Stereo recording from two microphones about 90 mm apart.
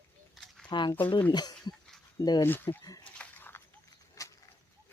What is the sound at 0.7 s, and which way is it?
Speech, 55° left (ahead or behind).